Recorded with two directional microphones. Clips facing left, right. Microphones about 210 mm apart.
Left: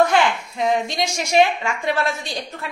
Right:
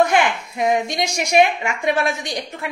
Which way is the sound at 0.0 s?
15° right (ahead or behind).